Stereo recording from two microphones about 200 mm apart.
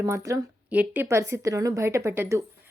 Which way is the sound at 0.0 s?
15° right (ahead or behind).